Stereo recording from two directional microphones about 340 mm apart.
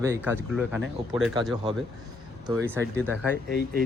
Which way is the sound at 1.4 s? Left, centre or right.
Centre.